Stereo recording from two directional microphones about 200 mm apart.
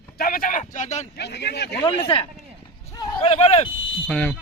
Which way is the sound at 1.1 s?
55° left (ahead or behind).